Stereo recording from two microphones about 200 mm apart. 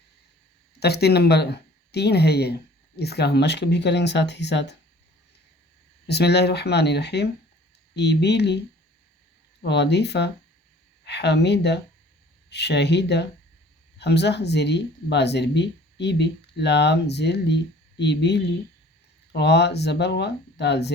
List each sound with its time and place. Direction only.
0.8 s speech: 55° left (ahead or behind)
6.1 s speech: 55° left (ahead or behind)